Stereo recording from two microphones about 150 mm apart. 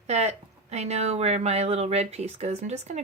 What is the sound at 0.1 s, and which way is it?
Speech, 45° right (ahead or behind).